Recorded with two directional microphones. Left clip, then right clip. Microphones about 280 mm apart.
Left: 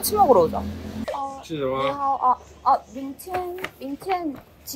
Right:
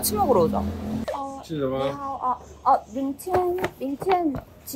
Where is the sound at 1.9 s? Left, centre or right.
Centre.